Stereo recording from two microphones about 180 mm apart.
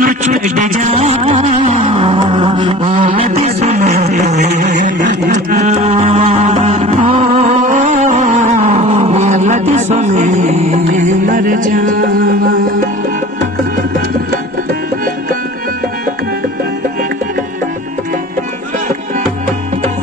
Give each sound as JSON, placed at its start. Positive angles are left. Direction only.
{"t": 0.0, "sound": "music", "side_deg": -45}